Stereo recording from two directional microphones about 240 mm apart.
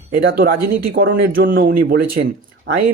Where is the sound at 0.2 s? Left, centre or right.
Right.